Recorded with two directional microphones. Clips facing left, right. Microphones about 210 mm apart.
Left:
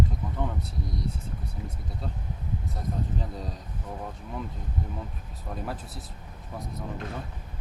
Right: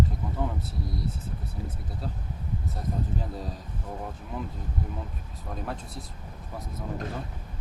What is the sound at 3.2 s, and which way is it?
Speech, centre (ahead or behind).